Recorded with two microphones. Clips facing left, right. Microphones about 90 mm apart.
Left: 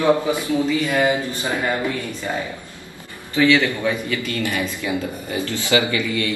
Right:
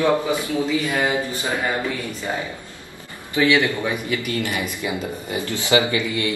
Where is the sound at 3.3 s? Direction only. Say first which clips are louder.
Left 1 dB; 20° right (ahead or behind).